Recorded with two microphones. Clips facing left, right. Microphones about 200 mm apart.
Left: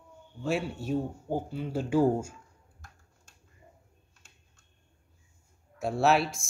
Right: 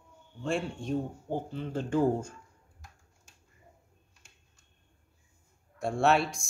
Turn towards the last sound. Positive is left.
turn(degrees=0)  # may be behind; listen again after turning